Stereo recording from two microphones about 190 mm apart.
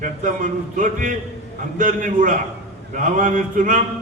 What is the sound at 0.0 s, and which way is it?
A man's voice, 40° right (ahead or behind).